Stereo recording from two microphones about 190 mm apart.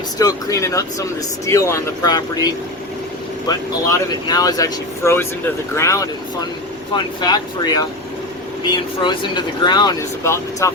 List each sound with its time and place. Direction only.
0.2 s speech: 20° left (ahead or behind)
3.9 s speech: 20° left (ahead or behind)